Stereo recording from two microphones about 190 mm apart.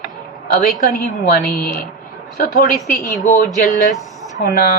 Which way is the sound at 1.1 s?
50° left (ahead or behind).